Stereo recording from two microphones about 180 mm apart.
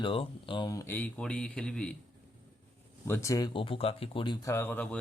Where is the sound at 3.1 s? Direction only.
15° left (ahead or behind).